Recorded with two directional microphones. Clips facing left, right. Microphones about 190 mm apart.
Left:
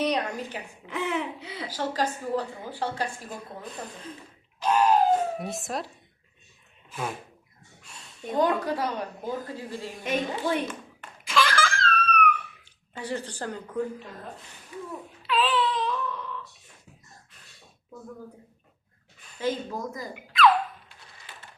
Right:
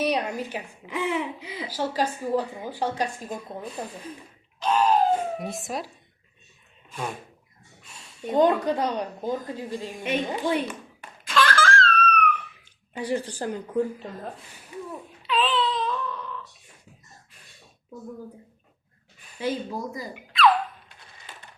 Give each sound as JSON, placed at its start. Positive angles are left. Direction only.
{"t": 0.0, "sound": "a woman's voice", "side_deg": -10}
{"t": 4.6, "sound": "a sound", "side_deg": 10}
{"t": 5.1, "sound": "speech", "side_deg": 0}
{"t": 7.9, "sound": "a sound", "side_deg": -10}
{"t": 8.4, "sound": "a woman's voice", "side_deg": -20}
{"t": 11.3, "sound": "laughter", "side_deg": 10}
{"t": 12.9, "sound": "a woman's voice", "side_deg": -10}
{"t": 15.3, "sound": "wail", "side_deg": 10}
{"t": 19.4, "sound": "a woman's voice", "side_deg": -15}